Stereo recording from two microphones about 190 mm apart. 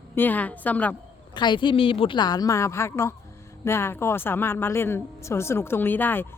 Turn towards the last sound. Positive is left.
turn(degrees=10)  # may be behind; listen again after turning